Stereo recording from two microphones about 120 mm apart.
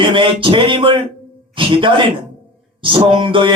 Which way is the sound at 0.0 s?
45° right (ahead or behind).